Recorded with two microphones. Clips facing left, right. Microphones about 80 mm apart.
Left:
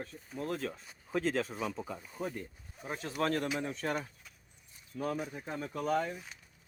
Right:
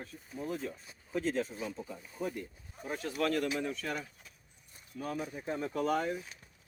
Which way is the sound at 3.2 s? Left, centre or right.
Left.